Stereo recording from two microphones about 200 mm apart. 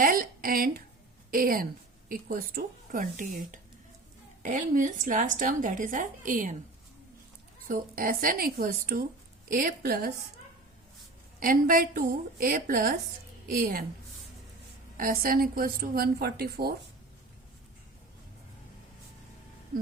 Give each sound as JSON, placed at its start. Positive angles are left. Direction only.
{"t": 0.0, "sound": "a woman's voice", "side_deg": -45}
{"t": 7.7, "sound": "a woman's voice", "side_deg": -45}
{"t": 11.3, "sound": "a woman's voice", "side_deg": -45}
{"t": 14.9, "sound": "a woman's voice", "side_deg": -45}